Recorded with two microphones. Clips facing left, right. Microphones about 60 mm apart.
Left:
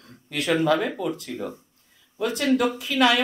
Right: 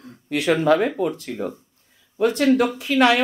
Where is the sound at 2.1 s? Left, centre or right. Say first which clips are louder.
Right 5 dB; right.